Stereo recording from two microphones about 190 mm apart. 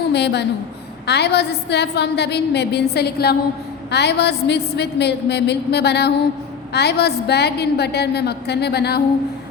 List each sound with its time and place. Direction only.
0.1 s a woman's voice: 60° left (ahead or behind)